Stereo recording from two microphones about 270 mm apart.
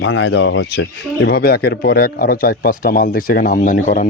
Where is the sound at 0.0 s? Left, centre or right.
Left.